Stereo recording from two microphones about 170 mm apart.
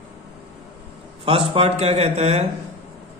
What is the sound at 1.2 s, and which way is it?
Speech, 35° right (ahead or behind).